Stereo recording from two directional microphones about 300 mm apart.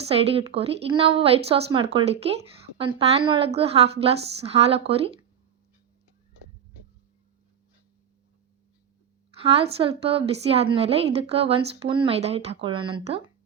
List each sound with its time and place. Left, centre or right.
0.1 s a woman's voice: centre
9.4 s a woman's voice: centre